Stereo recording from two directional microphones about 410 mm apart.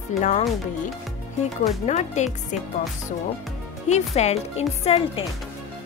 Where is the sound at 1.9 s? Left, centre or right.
Centre.